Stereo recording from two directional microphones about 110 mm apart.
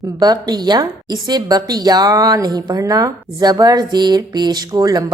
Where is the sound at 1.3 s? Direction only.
40° right (ahead or behind).